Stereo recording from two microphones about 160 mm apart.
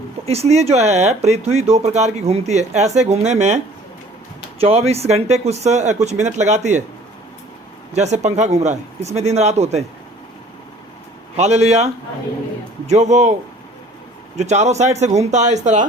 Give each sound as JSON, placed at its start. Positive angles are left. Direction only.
{"t": 0.3, "sound": "speech", "side_deg": -40}
{"t": 4.6, "sound": "speech", "side_deg": -40}
{"t": 7.9, "sound": "speech", "side_deg": -45}
{"t": 11.3, "sound": "speech", "side_deg": -45}
{"t": 12.9, "sound": "speech", "side_deg": -45}
{"t": 14.3, "sound": "speech", "side_deg": -45}